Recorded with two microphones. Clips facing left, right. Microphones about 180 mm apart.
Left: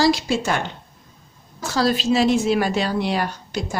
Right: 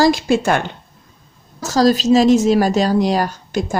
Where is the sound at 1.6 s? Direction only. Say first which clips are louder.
Right 6 dB; 40° right (ahead or behind).